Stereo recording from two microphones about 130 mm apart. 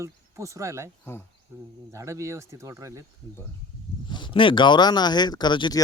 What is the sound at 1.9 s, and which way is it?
Speech, 25° right (ahead or behind).